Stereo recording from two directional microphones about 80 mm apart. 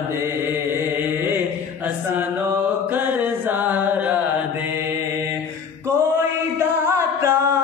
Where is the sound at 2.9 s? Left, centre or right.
Right.